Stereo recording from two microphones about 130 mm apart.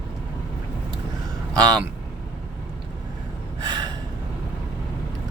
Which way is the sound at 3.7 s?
30° right (ahead or behind).